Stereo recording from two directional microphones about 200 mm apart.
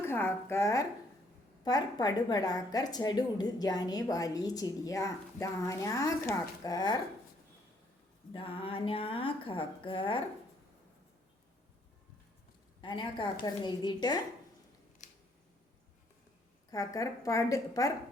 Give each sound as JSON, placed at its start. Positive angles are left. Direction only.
{"t": 0.0, "sound": "a woman's voice", "side_deg": 10}
{"t": 8.3, "sound": "a woman's voice", "side_deg": 25}
{"t": 12.8, "sound": "a woman's voice", "side_deg": 25}
{"t": 15.0, "sound": "scissors", "side_deg": 40}
{"t": 16.7, "sound": "a woman's voice", "side_deg": 15}